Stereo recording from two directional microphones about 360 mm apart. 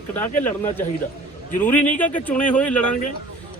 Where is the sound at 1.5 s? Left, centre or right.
Centre.